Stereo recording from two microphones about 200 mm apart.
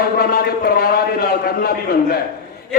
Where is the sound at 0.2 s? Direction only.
50° left (ahead or behind).